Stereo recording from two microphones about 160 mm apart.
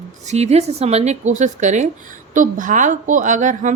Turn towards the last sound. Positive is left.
turn(degrees=-50)  # may be behind; listen again after turning